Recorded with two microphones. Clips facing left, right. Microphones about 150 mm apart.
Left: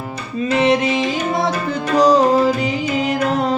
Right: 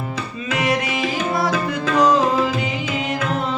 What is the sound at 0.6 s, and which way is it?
Music, 25° left (ahead or behind).